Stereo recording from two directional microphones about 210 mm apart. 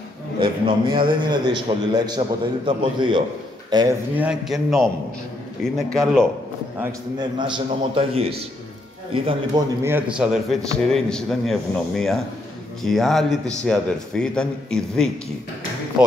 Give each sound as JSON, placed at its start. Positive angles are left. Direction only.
{"t": 0.4, "sound": "a man's voice", "side_deg": -25}
{"t": 4.2, "sound": "a man's voice", "side_deg": -5}
{"t": 6.8, "sound": "a man's voice", "side_deg": -15}
{"t": 9.8, "sound": "a man's voice", "side_deg": -5}